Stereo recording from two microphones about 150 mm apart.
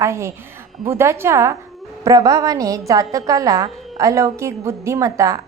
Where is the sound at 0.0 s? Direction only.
20° right (ahead or behind).